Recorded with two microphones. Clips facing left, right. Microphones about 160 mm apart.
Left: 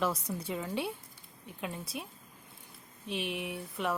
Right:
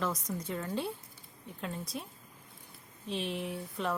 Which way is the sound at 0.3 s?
10° left (ahead or behind).